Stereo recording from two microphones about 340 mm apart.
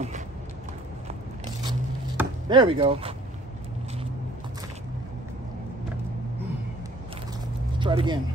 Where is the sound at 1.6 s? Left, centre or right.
Centre.